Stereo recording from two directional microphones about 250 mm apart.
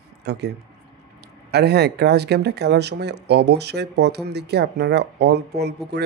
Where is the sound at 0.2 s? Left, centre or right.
Right.